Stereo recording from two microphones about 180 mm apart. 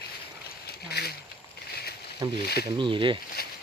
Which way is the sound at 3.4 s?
60° left (ahead or behind).